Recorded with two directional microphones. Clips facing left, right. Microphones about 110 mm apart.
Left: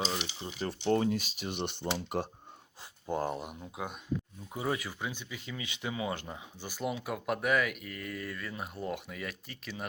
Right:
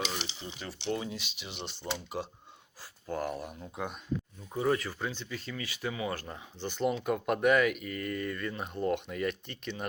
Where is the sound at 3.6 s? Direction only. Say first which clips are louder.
Right 2 dB; 5° left (ahead or behind).